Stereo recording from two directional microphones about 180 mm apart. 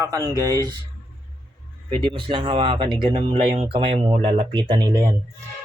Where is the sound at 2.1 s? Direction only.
30° right (ahead or behind).